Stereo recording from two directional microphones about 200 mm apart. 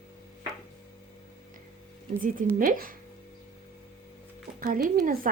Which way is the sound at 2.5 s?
45° right (ahead or behind).